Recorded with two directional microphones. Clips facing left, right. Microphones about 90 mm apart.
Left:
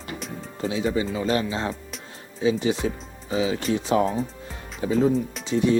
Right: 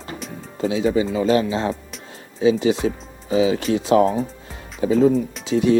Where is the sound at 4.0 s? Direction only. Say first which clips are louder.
Right 5 dB; 35° right (ahead or behind).